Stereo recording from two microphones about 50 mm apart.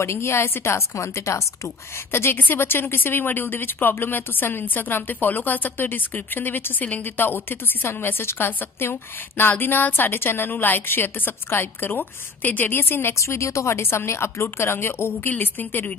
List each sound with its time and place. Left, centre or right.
0.0 s a woman's voice: left
2.3 s a woman's voice: left
13.1 s speech: left